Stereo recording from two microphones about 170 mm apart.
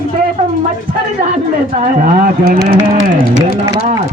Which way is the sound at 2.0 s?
55° right (ahead or behind).